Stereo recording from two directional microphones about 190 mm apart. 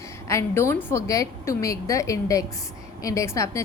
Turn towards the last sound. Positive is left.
turn(degrees=15)  # may be behind; listen again after turning